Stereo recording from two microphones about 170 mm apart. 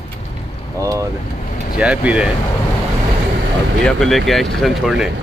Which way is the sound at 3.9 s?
Centre (ahead or behind).